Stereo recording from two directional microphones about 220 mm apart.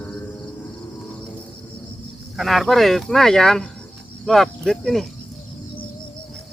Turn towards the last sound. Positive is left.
turn(degrees=0)  # may be behind; listen again after turning